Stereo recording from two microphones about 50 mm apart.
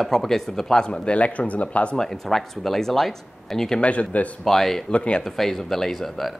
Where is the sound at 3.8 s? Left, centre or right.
Left.